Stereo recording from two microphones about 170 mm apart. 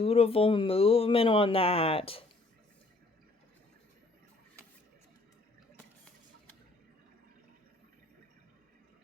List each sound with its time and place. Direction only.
0.0 s speech: 35° left (ahead or behind)